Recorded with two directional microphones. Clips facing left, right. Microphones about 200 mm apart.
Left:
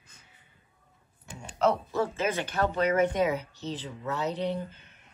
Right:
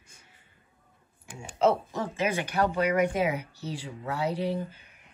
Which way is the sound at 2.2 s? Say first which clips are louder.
Right 1 dB; 15° right (ahead or behind).